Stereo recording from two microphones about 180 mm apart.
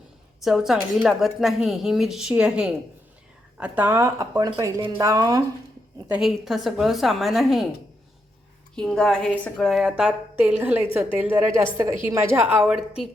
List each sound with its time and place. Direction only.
0.4 s a woman's voice: centre (ahead or behind); by 5.4 s 20° right (ahead or behind)
6.1 s a woman's voice: 5° right (ahead or behind)
8.7 s a woman's voice: 5° left (ahead or behind)